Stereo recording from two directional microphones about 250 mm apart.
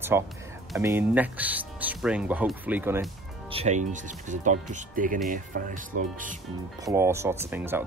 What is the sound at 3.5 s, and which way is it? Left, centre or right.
Speech, right.